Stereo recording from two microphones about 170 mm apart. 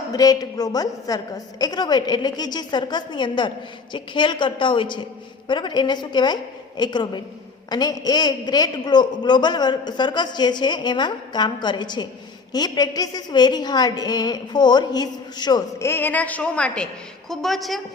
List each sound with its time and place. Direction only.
0.1 s a woman's voice: 20° left (ahead or behind); by 17.8 s centre (ahead or behind)